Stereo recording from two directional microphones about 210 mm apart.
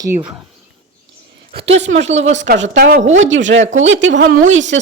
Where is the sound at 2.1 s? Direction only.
30° right (ahead or behind).